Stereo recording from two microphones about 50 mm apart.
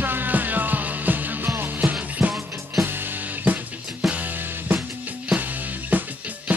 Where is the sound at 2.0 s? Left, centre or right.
Right.